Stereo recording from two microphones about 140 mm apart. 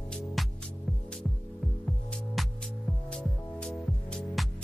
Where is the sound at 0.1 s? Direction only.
Centre (ahead or behind).